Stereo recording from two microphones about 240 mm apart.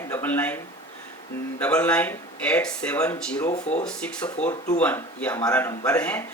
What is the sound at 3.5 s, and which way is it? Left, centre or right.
Speech, left.